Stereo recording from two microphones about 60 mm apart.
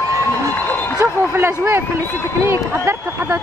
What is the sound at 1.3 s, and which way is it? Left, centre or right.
Speech, right.